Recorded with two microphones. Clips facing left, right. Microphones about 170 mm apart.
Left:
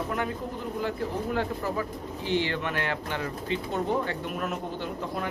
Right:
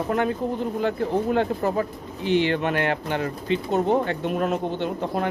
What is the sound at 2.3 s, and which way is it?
Speech, 20° right (ahead or behind).